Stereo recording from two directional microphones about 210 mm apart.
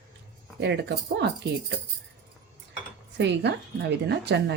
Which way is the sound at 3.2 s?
55° right (ahead or behind).